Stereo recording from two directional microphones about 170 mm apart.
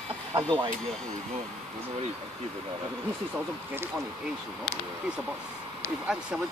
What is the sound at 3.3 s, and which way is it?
Speech, 15° right (ahead or behind).